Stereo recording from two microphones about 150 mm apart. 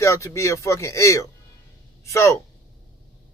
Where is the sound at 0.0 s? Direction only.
20° left (ahead or behind).